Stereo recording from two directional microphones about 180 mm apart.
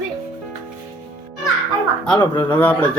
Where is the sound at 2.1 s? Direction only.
10° left (ahead or behind).